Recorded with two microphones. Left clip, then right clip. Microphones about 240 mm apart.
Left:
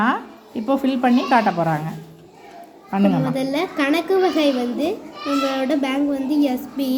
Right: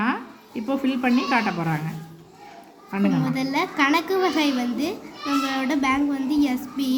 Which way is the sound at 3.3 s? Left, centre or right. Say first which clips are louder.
Left 1 dB; centre.